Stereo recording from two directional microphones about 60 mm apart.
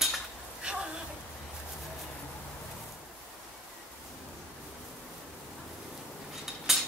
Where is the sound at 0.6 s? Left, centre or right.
Centre.